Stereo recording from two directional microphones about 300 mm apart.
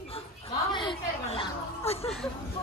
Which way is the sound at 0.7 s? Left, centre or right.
Centre.